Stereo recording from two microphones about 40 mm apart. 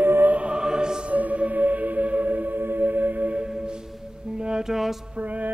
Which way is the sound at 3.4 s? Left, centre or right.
Centre.